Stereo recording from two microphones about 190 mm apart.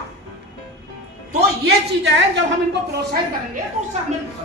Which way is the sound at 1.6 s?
65° right (ahead or behind).